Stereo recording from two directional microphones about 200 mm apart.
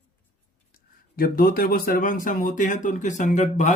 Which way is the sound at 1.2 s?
45° left (ahead or behind).